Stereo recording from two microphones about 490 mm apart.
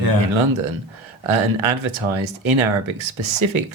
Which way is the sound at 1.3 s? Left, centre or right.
Right.